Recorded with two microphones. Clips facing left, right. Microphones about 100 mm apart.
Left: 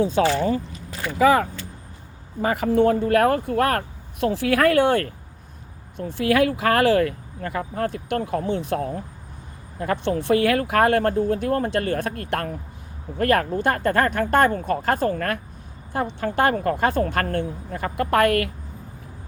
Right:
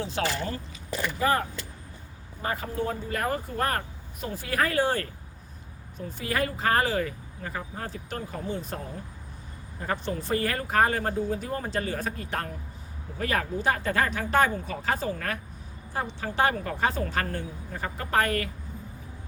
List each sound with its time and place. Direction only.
1.2 s speech: 90° left; by 5.1 s 65° left (ahead or behind)
6.0 s speech: 75° left (ahead or behind)